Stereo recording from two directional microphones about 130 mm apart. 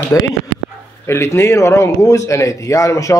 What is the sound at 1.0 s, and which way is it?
A man's voice, 20° left (ahead or behind).